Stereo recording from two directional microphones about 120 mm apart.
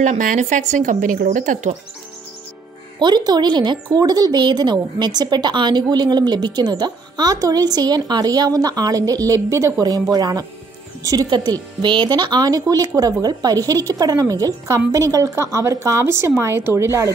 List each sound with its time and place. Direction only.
0.0 s a woman's voice: 85° right
3.0 s speech: 35° right (ahead or behind)